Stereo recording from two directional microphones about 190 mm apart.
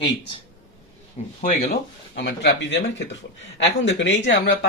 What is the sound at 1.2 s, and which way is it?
Speech, 40° left (ahead or behind).